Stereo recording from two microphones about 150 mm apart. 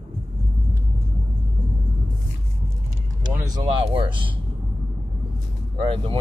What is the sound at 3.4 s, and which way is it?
Speech, 30° right (ahead or behind).